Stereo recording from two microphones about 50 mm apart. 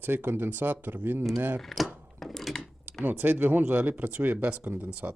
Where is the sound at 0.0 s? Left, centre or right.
Right.